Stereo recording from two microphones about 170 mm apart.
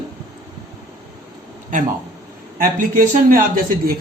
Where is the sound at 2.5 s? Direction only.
55° right (ahead or behind).